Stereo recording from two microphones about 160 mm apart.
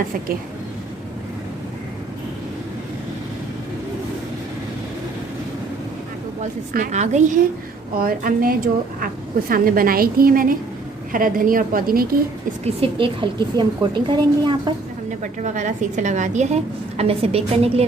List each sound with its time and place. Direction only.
6.4 s a woman's voice: 45° right (ahead or behind)
7.9 s a woman's voice: 65° right (ahead or behind)
12.6 s a woman's voice: 35° right (ahead or behind)
15.2 s a woman's voice: 50° right (ahead or behind)